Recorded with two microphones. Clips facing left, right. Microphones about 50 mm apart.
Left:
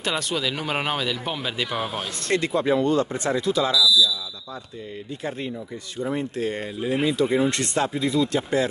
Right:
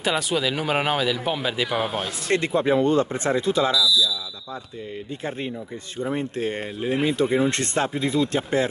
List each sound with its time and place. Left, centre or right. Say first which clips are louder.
0.0 s speech: right 3 dB; centre
2.3 s speech: right 1 dB; right
3.7 s speech: left 2 dB; right
5.9 s speech: even; right